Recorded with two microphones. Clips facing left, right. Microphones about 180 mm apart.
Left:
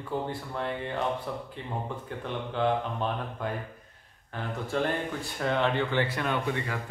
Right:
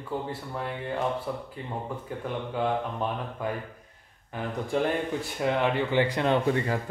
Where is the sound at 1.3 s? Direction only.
5° right (ahead or behind).